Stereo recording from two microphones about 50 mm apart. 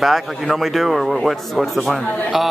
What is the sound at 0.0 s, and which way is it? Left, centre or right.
A man's voice, centre.